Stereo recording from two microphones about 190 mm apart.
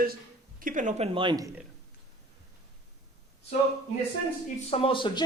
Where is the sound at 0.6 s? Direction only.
40° right (ahead or behind); by 1.5 s 20° right (ahead or behind).